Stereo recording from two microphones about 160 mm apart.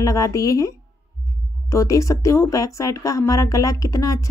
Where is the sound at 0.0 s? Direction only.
20° left (ahead or behind).